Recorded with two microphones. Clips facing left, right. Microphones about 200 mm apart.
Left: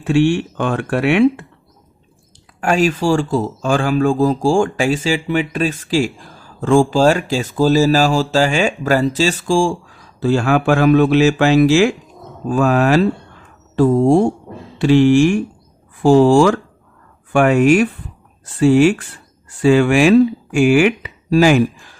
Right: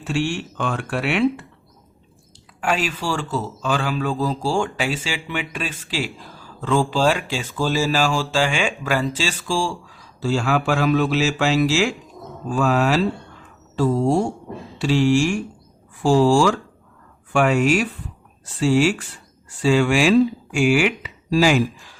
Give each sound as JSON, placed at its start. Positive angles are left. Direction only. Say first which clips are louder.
{"t": 0.0, "sound": "speech", "louder": "left 9 dB", "side_deg": 55}
{"t": 2.6, "sound": "speech", "louder": "left 8 dB", "side_deg": 45}
{"t": 10.2, "sound": "speech", "louder": "left 6 dB", "side_deg": 55}